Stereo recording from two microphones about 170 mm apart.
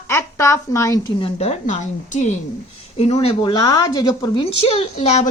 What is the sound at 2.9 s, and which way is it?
Speech, 35° left (ahead or behind).